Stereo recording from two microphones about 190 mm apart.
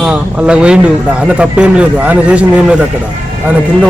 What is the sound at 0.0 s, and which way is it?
A man's voice, 5° right (ahead or behind).